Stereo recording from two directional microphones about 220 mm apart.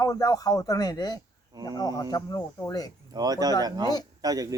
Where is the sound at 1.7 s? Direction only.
15° left (ahead or behind).